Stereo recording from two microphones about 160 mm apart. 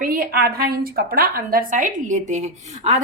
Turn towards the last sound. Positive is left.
turn(degrees=-50)  # may be behind; listen again after turning